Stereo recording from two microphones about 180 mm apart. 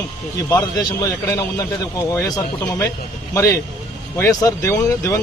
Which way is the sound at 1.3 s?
20° left (ahead or behind).